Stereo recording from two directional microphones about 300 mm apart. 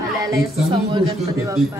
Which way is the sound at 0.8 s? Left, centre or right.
Centre.